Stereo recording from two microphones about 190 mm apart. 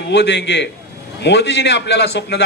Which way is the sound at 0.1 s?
65° left (ahead or behind).